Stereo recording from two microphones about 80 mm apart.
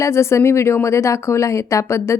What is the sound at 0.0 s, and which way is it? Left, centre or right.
A woman's voice, left.